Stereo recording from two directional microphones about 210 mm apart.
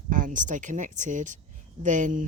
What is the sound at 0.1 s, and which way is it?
Speech, 40° right (ahead or behind).